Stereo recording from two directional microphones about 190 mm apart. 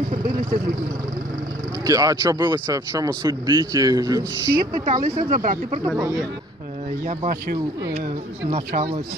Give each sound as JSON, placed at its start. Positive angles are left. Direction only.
{"t": 0.2, "sound": "vehicle", "side_deg": -20}
{"t": 1.9, "sound": "speech", "side_deg": -15}
{"t": 4.8, "sound": "speech", "side_deg": -45}
{"t": 7.1, "sound": "speech", "side_deg": -50}
{"t": 8.5, "sound": "speech", "side_deg": -35}